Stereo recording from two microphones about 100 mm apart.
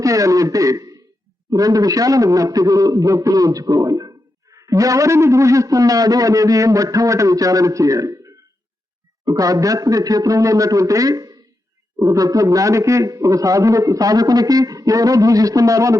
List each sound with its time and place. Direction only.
0.0 s a man's voice: 35° right (ahead or behind)